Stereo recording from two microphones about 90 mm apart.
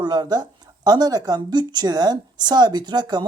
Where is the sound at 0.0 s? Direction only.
50° right (ahead or behind).